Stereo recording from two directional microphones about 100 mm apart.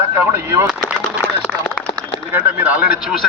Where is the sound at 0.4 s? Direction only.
25° right (ahead or behind).